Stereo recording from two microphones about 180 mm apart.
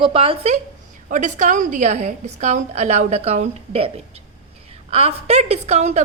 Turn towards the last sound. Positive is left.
turn(degrees=-40)  # may be behind; listen again after turning